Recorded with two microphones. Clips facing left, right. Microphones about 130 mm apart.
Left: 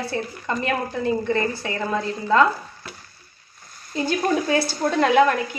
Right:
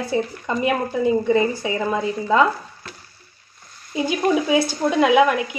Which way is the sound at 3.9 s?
10° right (ahead or behind).